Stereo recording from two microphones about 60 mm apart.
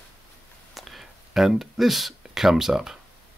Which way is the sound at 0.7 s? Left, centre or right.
Centre.